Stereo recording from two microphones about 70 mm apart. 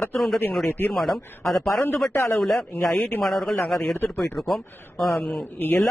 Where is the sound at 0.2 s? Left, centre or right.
Centre.